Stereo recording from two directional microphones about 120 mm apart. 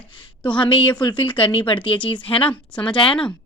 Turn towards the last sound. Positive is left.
turn(degrees=45)  # may be behind; listen again after turning